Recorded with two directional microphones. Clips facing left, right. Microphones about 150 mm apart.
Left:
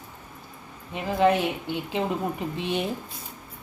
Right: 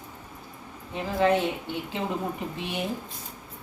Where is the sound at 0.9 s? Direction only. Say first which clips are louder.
Left 2 dB; 20° left (ahead or behind).